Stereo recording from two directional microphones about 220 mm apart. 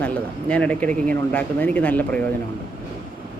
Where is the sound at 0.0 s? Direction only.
5° left (ahead or behind).